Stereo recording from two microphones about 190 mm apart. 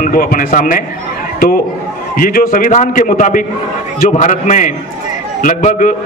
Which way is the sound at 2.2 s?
50° left (ahead or behind).